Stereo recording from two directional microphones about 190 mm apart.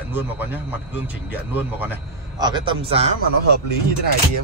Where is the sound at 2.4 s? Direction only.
25° right (ahead or behind).